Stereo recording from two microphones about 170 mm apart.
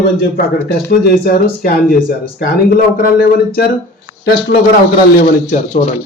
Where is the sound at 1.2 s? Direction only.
60° left (ahead or behind).